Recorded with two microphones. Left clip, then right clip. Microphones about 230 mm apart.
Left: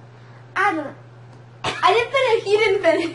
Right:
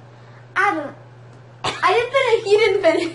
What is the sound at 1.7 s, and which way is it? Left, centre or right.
Speech, left.